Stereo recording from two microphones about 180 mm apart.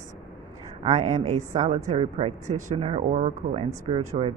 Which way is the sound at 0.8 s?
40° right (ahead or behind).